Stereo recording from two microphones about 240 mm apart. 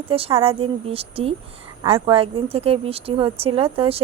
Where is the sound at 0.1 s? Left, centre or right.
Right.